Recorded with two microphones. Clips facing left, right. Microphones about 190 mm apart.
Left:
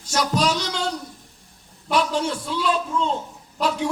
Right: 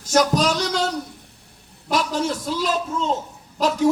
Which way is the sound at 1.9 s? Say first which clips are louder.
Even; 40° right (ahead or behind).